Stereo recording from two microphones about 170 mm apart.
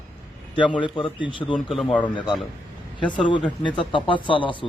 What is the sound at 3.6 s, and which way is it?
Speech, 30° left (ahead or behind).